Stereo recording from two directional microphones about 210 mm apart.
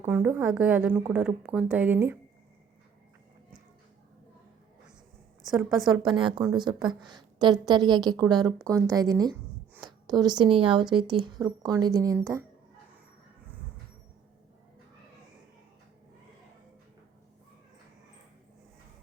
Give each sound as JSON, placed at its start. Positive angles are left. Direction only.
{"t": 0.0, "sound": "a woman's voice", "side_deg": -10}
{"t": 5.5, "sound": "a woman's voice", "side_deg": 0}
{"t": 6.1, "sound": "a woman's voice", "side_deg": -20}